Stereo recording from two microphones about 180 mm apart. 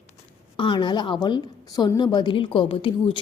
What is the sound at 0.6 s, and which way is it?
A woman's voice, 25° left (ahead or behind).